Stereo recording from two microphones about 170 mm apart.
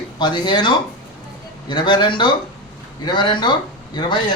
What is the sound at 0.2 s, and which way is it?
A man's voice, 25° left (ahead or behind).